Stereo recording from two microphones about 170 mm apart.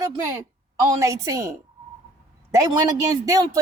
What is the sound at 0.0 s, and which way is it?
A woman's voice, 20° right (ahead or behind).